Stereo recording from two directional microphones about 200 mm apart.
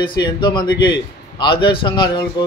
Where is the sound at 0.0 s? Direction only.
25° left (ahead or behind).